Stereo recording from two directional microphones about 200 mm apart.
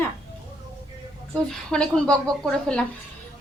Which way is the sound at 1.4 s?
5° left (ahead or behind).